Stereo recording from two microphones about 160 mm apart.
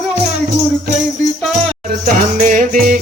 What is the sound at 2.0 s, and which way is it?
Music, 55° right (ahead or behind).